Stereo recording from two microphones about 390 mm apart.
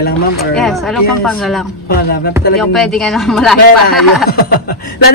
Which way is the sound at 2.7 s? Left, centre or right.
Centre.